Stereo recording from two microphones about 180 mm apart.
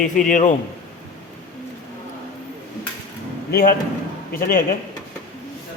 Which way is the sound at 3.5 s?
50° left (ahead or behind).